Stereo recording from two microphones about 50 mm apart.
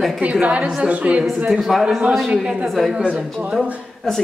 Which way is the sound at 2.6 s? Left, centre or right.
Centre.